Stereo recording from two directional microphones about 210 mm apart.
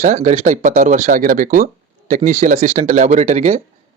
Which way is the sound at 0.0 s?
35° right (ahead or behind).